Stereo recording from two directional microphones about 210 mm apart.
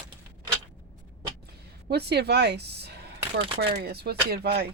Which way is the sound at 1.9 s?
50° right (ahead or behind).